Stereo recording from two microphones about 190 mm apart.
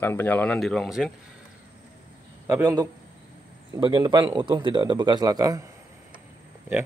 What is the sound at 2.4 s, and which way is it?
Speech, 15° right (ahead or behind).